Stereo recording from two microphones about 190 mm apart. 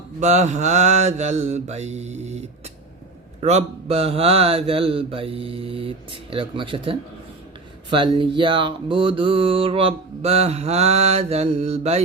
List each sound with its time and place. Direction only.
0.2 s mantra: 40° right (ahead or behind)
3.4 s speech: 35° right (ahead or behind)